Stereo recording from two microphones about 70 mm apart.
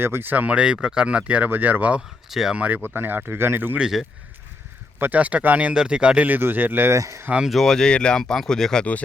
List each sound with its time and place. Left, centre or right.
0.0 s speech: right
1.5 s speech: right
2.3 s speech: centre
2.6 s speech: right
3.8 s speech: centre
4.9 s speech: right
6.9 s speech: right
7.4 s speech: centre